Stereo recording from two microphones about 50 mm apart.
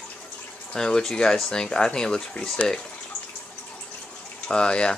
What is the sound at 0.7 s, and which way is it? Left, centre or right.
Speech, centre.